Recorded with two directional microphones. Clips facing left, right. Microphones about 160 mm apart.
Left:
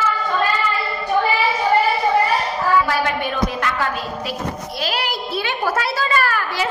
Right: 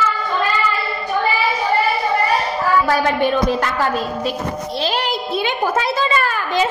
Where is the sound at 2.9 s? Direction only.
30° right (ahead or behind).